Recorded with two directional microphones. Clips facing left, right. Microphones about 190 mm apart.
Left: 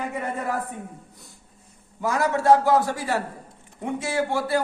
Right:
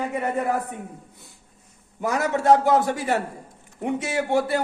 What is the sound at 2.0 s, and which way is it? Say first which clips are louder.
A man's voice: even; 20° right (ahead or behind).